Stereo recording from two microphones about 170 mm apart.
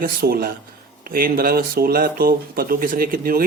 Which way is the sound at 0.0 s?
65° right (ahead or behind).